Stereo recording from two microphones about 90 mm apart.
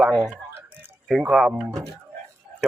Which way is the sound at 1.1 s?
10° right (ahead or behind).